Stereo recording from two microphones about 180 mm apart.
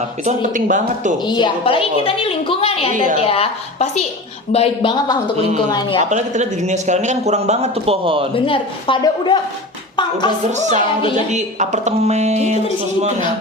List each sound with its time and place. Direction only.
0.3 s speech: 45° right (ahead or behind)
1.2 s a woman's voice: 25° left (ahead or behind)
5.4 s a man's voice: 40° right (ahead or behind)
8.4 s a woman's voice: 30° left (ahead or behind)
10.5 s a man's voice: 40° right (ahead or behind)